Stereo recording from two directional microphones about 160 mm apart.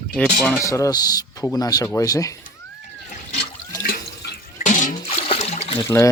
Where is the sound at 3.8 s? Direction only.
65° left (ahead or behind).